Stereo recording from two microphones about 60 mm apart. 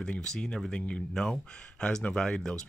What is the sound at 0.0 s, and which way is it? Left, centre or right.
Speech, centre.